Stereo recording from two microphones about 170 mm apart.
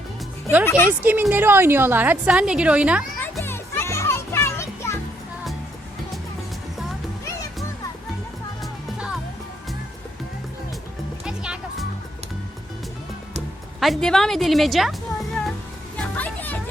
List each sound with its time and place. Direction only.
0.6 s speech: 15° left (ahead or behind)
0.9 s a woman's voice: 10° right (ahead or behind)
3.4 s music: 15° left (ahead or behind)
11.3 s music: 5° right (ahead or behind)
13.7 s a woman's voice: centre (ahead or behind)
16.0 s music: 10° left (ahead or behind)